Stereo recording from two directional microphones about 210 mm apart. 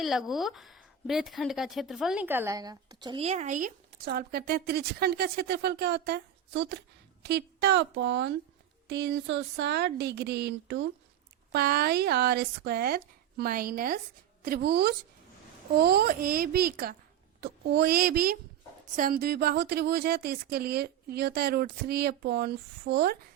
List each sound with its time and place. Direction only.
0.0 s a woman's voice: centre (ahead or behind); by 23.1 s 50° right (ahead or behind)